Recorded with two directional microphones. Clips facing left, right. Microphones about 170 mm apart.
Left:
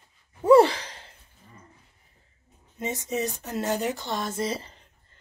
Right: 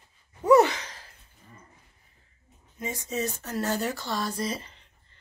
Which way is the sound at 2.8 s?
20° left (ahead or behind).